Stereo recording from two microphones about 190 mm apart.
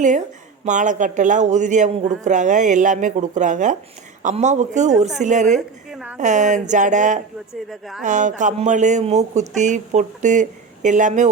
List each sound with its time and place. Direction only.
0.6 s a man's voice: 40° right (ahead or behind)
5.5 s a woman's voice: 5° right (ahead or behind)
6.1 s a man's voice: 40° right (ahead or behind)
7.7 s a woman's voice: centre (ahead or behind)
8.0 s a man's voice: 40° right (ahead or behind)